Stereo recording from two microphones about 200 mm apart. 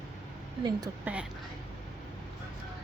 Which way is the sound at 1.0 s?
5° right (ahead or behind).